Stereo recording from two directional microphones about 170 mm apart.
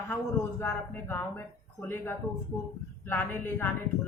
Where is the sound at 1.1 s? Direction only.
10° left (ahead or behind).